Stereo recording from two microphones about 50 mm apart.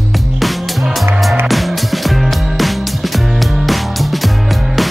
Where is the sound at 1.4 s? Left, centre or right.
Centre.